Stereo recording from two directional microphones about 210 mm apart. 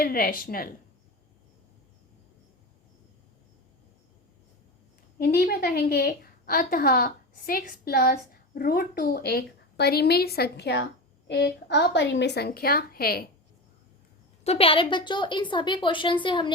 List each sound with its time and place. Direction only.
0.0 s a woman's voice: 45° left (ahead or behind)
5.2 s a woman's voice: 45° left (ahead or behind)
14.4 s a woman's voice: 30° left (ahead or behind)